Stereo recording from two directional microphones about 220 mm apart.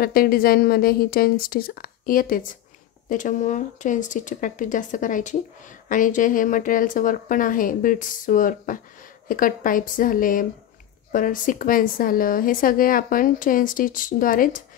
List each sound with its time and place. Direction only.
0.0 s speech: 40° left (ahead or behind)